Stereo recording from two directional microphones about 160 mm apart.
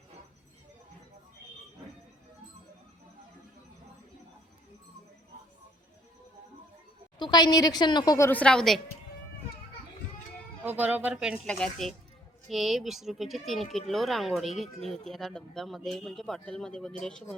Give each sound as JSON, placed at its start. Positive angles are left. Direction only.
{"t": 7.2, "sound": "a woman's voice", "side_deg": 25}
{"t": 8.3, "sound": "speech", "side_deg": 5}
{"t": 10.6, "sound": "speech", "side_deg": -10}
{"t": 11.4, "sound": "speech", "side_deg": 5}